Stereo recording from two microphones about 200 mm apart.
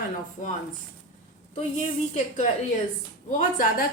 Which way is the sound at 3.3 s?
40° left (ahead or behind).